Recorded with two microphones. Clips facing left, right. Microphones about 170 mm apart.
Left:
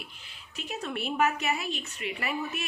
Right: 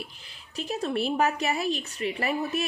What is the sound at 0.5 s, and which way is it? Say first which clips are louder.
A woman's voice: right 6 dB; 35° right (ahead or behind).